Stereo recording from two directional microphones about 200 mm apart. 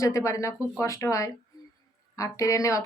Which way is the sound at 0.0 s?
15° left (ahead or behind).